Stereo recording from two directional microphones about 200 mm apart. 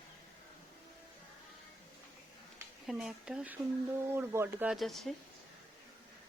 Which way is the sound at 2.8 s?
Centre (ahead or behind).